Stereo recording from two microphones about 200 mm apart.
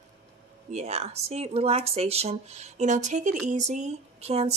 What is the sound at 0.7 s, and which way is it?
Speech, 35° right (ahead or behind).